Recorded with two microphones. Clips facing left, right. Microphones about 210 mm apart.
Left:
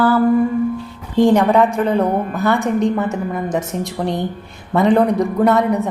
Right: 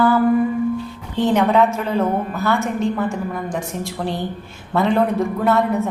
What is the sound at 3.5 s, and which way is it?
A woman's voice, 20° left (ahead or behind).